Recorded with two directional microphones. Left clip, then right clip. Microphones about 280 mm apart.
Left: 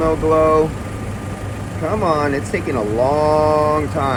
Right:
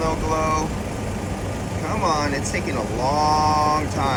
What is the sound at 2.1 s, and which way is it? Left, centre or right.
Speech, centre.